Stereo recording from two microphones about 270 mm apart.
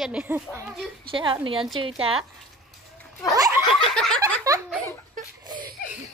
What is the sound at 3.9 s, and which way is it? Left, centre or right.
Speech, centre.